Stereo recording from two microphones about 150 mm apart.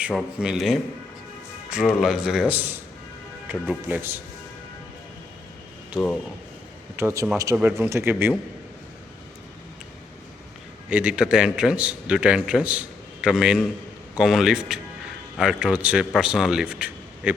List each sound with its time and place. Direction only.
0.1 s a man's voice: centre (ahead or behind)
6.9 s a man's voice: 15° right (ahead or behind)
10.8 s a man's voice: 5° right (ahead or behind)